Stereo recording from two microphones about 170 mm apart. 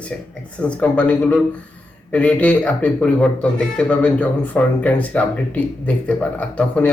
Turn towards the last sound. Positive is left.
turn(degrees=10)  # may be behind; listen again after turning